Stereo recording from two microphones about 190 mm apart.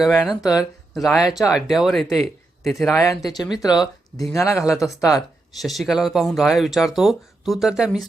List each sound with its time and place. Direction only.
0.0 s speech: centre (ahead or behind)
3.2 s speech: 20° left (ahead or behind)
3.7 s speech: centre (ahead or behind)
4.6 s speech: 15° left (ahead or behind)
5.6 s speech: centre (ahead or behind)